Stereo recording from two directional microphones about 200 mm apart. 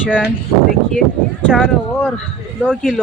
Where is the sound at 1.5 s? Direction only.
Centre (ahead or behind).